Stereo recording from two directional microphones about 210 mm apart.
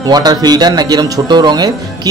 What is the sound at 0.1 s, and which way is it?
Speech, 20° right (ahead or behind).